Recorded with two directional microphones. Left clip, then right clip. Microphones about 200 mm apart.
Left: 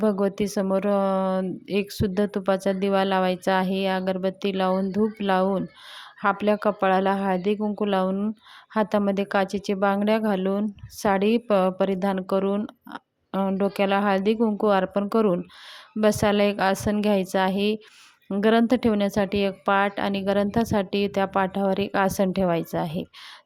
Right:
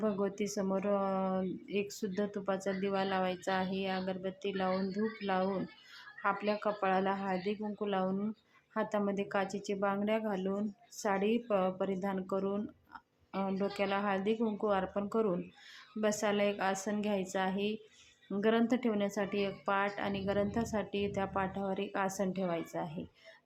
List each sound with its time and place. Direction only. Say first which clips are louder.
0.0 s speech: left 11 dB; 40° left (ahead or behind)